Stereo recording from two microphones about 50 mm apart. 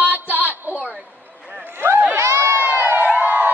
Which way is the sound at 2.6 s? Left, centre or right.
Right.